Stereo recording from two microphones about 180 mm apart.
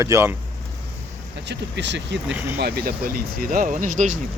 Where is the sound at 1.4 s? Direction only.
75° right (ahead or behind).